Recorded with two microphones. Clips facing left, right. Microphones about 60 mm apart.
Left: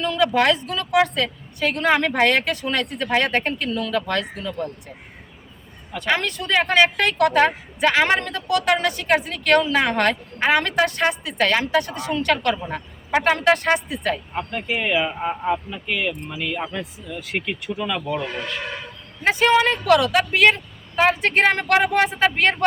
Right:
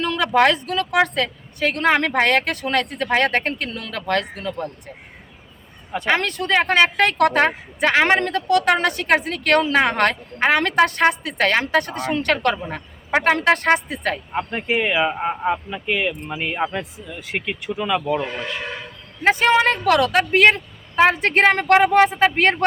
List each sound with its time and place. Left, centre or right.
0.2 s speech: right
5.9 s speech: right
6.1 s speech: right
14.8 s speech: centre
16.3 s speech: right
17.1 s speech: centre
18.0 s speech: right
19.2 s speech: right